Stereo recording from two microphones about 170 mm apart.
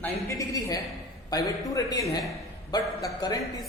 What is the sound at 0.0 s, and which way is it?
A man's voice, 20° left (ahead or behind).